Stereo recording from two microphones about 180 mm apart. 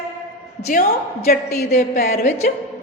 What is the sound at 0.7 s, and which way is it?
A man's voice, 50° left (ahead or behind).